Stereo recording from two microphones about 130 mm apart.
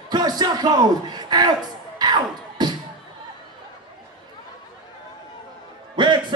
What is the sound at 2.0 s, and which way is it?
Music, 35° right (ahead or behind).